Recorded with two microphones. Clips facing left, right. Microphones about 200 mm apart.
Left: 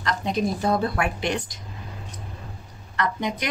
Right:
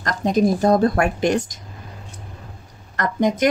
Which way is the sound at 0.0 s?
45° right (ahead or behind).